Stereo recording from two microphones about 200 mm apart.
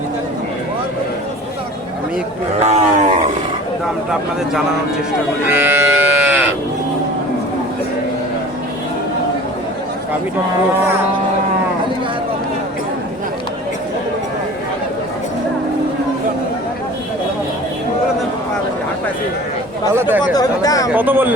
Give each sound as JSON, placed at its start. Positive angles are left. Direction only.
{"t": 2.6, "sound": "roaring cats", "side_deg": -35}
{"t": 5.5, "sound": "sheep", "side_deg": -10}
{"t": 19.9, "sound": "speech", "side_deg": -10}
{"t": 20.3, "sound": "speech", "side_deg": 20}
{"t": 20.9, "sound": "speech", "side_deg": -10}